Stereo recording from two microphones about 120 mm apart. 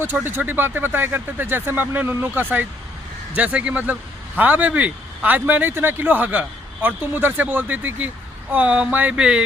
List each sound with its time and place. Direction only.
0.0 s speech: 20° right (ahead or behind)